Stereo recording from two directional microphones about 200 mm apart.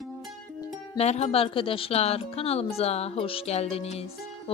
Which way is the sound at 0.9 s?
35° left (ahead or behind).